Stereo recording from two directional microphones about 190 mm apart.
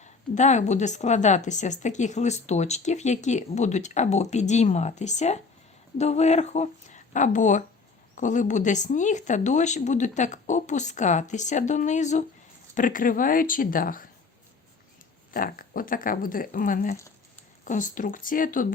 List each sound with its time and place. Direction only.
0.0 s speech: 40° left (ahead or behind)
15.3 s speech: 50° left (ahead or behind)